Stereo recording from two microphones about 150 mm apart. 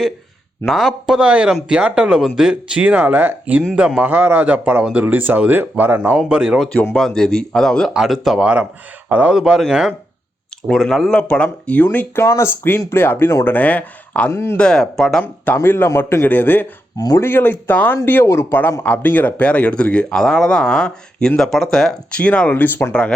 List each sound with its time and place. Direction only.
0.6 s speech: centre (ahead or behind)
6.7 s speech: 5° left (ahead or behind)
14.6 s speech: 5° left (ahead or behind)